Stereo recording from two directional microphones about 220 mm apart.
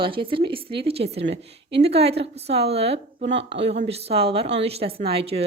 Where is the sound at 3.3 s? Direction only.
55° right (ahead or behind).